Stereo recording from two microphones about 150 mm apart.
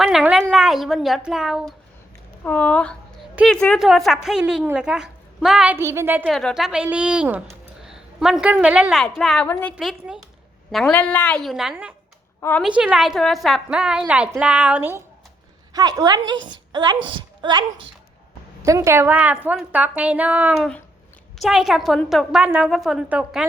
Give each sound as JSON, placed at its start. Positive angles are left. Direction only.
{"t": 0.0, "sound": "a woman's voice", "side_deg": 0}
{"t": 2.4, "sound": "a woman's voice", "side_deg": 10}
{"t": 5.7, "sound": "a woman's voice", "side_deg": -15}
{"t": 6.2, "sound": "a woman's voice", "side_deg": 0}
{"t": 9.7, "sound": "a woman's voice", "side_deg": -5}
{"t": 10.9, "sound": "a woman's voice", "side_deg": 10}
{"t": 12.4, "sound": "a woman's voice", "side_deg": 15}
{"t": 12.6, "sound": "a woman's voice", "side_deg": -5}
{"t": 15.7, "sound": "a woman's voice", "side_deg": -25}